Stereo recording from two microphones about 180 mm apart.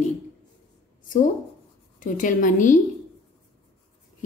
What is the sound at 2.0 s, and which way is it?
Speech, 45° left (ahead or behind).